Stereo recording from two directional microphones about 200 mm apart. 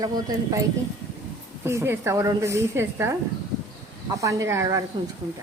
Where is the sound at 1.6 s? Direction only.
15° right (ahead or behind).